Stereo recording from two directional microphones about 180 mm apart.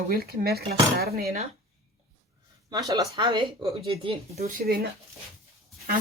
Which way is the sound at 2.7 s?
20° right (ahead or behind).